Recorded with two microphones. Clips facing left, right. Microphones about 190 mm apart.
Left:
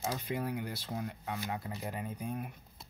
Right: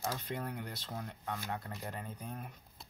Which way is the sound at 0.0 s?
10° left (ahead or behind).